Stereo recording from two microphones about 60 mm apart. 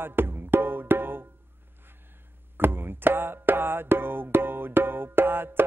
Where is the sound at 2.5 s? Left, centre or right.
Right.